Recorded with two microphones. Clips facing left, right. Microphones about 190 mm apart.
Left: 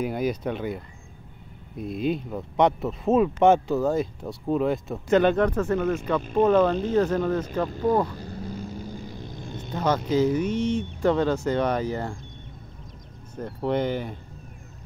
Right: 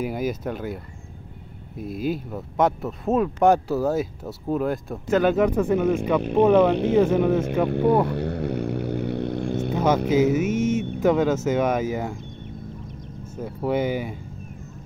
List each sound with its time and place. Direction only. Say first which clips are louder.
0.0 s speech: even; 5° right (ahead or behind)
1.8 s speech: even; 5° right (ahead or behind)
7.6 s speech: right 5 dB; 65° right (ahead or behind)
8.1 s vehicle: right 10 dB; 70° right (ahead or behind)
10.0 s speech: right 3 dB; 10° right (ahead or behind)
13.4 s speech: right 2 dB; 5° right (ahead or behind)